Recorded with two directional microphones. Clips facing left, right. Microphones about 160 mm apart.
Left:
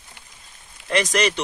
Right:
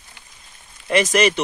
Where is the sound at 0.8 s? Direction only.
5° right (ahead or behind).